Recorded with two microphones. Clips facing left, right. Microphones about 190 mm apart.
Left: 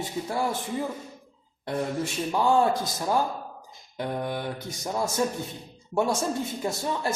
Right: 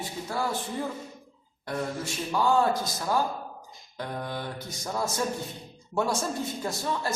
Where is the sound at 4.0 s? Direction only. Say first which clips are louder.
Left 4 dB; 20° left (ahead or behind).